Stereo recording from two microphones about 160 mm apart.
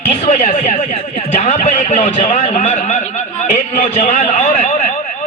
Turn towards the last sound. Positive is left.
turn(degrees=50)  # may be behind; listen again after turning